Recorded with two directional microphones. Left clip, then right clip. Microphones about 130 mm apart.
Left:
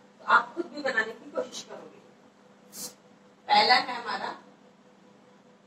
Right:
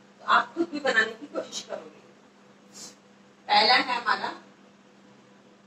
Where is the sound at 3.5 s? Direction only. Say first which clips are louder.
Right 1 dB; 20° right (ahead or behind).